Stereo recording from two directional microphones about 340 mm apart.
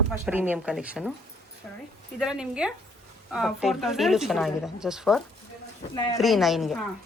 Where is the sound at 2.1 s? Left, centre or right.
Centre.